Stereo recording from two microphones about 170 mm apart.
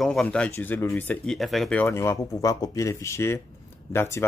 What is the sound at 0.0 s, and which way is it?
Speech, 5° left (ahead or behind).